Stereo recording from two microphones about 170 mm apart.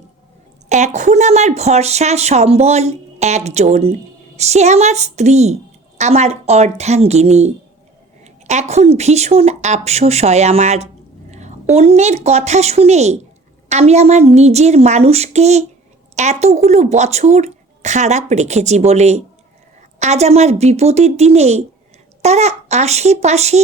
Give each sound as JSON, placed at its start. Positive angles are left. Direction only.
{"t": 0.7, "sound": "speech", "side_deg": -45}
{"t": 11.3, "sound": "a sound", "side_deg": -45}
{"t": 11.7, "sound": "speech", "side_deg": -40}